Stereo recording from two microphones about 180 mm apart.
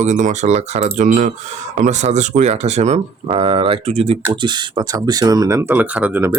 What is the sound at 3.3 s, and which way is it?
Speech, 30° right (ahead or behind).